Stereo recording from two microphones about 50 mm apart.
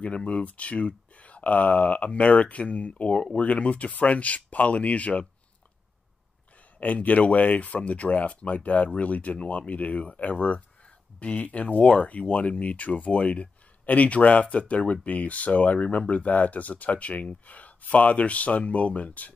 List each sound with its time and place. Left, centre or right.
0.0 s speech: left
6.8 s speech: left